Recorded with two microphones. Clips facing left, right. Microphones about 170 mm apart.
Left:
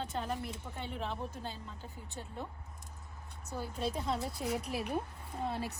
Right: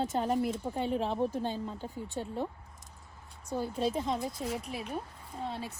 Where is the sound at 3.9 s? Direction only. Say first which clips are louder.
Right 3 dB; 20° right (ahead or behind).